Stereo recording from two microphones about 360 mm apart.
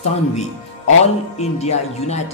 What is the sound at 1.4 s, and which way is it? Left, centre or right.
Speech, centre.